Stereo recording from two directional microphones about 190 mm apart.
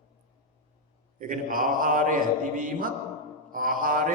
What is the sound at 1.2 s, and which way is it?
Mantra, 45° right (ahead or behind).